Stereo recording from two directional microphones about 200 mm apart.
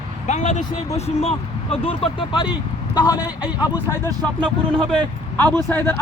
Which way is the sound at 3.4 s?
5° right (ahead or behind).